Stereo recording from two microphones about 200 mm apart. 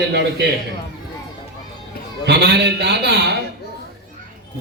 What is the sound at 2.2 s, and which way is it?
A man's voice, 55° right (ahead or behind).